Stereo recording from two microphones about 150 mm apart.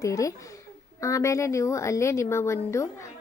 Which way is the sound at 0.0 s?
20° left (ahead or behind).